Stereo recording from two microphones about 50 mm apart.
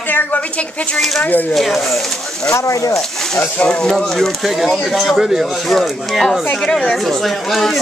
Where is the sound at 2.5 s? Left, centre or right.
Left.